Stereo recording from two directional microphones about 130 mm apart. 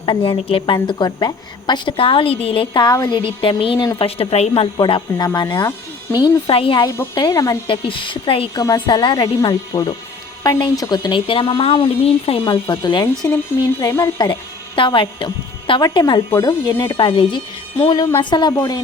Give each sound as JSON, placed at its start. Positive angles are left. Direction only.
{"t": 0.0, "sound": "a woman's voice", "side_deg": 40}
{"t": 2.9, "sound": "speech", "side_deg": 25}
{"t": 3.2, "sound": "a woman's voice", "side_deg": 40}
{"t": 4.8, "sound": "a woman's voice", "side_deg": 35}
{"t": 6.2, "sound": "a woman's voice", "side_deg": 45}
{"t": 6.8, "sound": "speech", "side_deg": 20}
{"t": 7.7, "sound": "a woman's voice", "side_deg": 40}
{"t": 8.5, "sound": "a woman's voice", "side_deg": 30}
{"t": 12.5, "sound": "speech", "side_deg": 30}
{"t": 14.8, "sound": "a woman's voice", "side_deg": 40}
{"t": 16.8, "sound": "a woman's voice", "side_deg": 35}